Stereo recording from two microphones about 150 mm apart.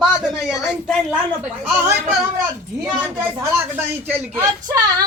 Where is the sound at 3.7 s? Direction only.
15° right (ahead or behind).